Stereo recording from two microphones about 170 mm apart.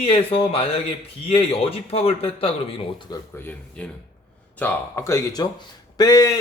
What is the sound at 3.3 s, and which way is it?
Speech, 10° left (ahead or behind).